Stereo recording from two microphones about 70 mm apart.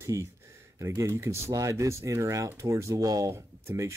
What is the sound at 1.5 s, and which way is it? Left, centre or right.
Speech, right.